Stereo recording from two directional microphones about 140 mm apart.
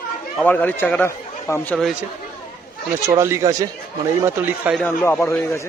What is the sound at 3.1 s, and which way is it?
Speech, 20° right (ahead or behind).